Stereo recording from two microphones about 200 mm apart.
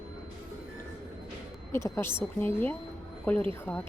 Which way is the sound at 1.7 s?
10° left (ahead or behind).